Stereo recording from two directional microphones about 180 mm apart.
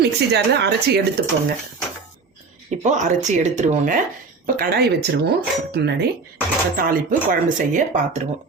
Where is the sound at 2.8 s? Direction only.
40° right (ahead or behind).